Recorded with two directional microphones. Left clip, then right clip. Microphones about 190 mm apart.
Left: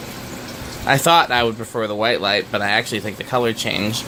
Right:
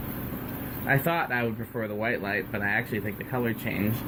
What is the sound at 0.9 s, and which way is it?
Speech, 30° left (ahead or behind).